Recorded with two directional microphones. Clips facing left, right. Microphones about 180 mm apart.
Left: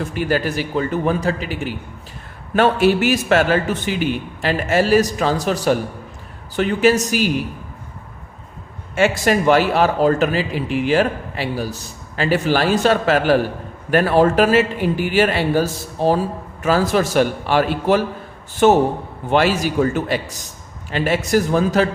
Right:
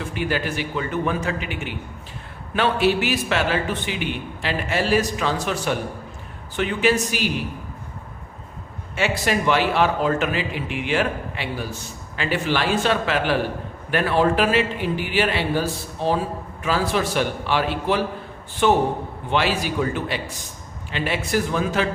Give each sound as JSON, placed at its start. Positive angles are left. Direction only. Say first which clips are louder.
{"t": 0.0, "sound": "a man's voice", "louder": "left 5 dB", "side_deg": 40}
{"t": 9.0, "sound": "a man's voice", "louder": "left 6 dB", "side_deg": 45}